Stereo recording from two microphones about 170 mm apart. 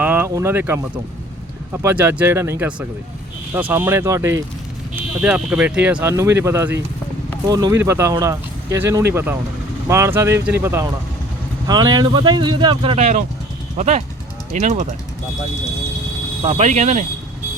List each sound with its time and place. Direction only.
0.0 s speech: 10° right (ahead or behind)
11.7 s speech: 25° right (ahead or behind); by 14.8 s 45° right (ahead or behind)
16.4 s speech: 35° right (ahead or behind)